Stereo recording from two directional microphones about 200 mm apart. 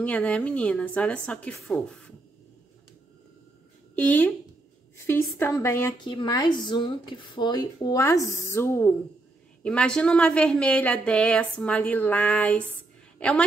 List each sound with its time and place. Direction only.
0.0 s speech: 5° left (ahead or behind)
3.9 s speech: 10° left (ahead or behind)